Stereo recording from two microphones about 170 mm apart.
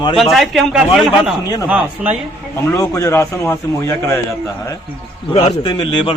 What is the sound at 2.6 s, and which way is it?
A man's voice, 20° left (ahead or behind).